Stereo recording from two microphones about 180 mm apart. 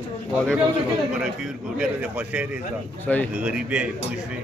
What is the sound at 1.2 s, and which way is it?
A man's voice, 5° right (ahead or behind).